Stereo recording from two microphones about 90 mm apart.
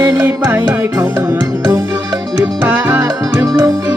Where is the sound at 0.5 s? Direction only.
25° right (ahead or behind).